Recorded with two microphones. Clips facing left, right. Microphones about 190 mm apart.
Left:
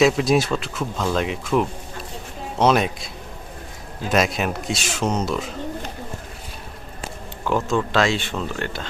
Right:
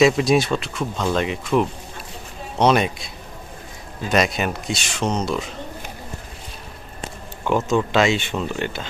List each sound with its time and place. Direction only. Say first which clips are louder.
0.0 s speech: right 1 dB; centre (ahead or behind)
4.1 s speech: right 1 dB; centre (ahead or behind)
7.4 s speech: right 2 dB; 5° right (ahead or behind)
8.1 s speech: right 2 dB; 15° right (ahead or behind)